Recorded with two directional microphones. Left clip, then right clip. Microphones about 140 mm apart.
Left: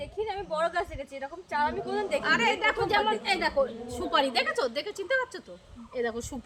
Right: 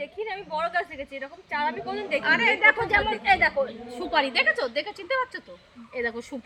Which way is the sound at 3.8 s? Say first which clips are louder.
Right 2 dB; 20° left (ahead or behind).